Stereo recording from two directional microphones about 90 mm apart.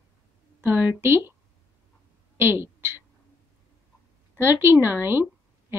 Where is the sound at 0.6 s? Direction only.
25° right (ahead or behind).